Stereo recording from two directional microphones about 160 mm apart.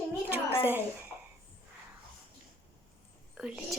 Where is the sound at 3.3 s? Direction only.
5° right (ahead or behind).